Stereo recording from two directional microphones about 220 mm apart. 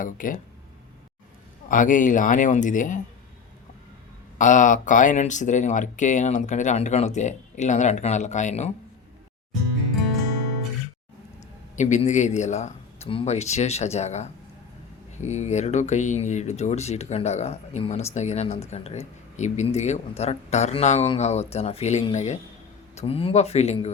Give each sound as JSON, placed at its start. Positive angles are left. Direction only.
{"t": 0.0, "sound": "speech", "side_deg": 40}
{"t": 1.7, "sound": "speech", "side_deg": 35}
{"t": 4.4, "sound": "speech", "side_deg": 35}
{"t": 11.8, "sound": "speech", "side_deg": 30}